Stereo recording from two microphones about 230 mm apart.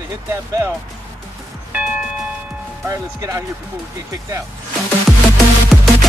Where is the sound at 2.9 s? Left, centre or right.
Centre.